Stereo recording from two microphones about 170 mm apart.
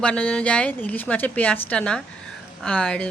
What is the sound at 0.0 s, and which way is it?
Speech, 5° left (ahead or behind).